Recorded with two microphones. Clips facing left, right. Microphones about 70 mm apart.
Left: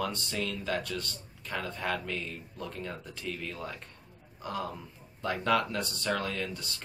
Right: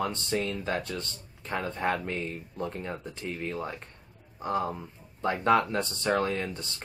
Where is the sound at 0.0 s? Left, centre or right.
Right.